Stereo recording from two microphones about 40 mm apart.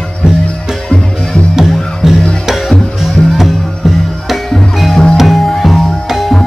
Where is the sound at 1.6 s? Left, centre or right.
Centre.